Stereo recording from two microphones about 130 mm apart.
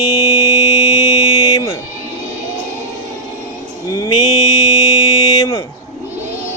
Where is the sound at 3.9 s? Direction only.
30° left (ahead or behind).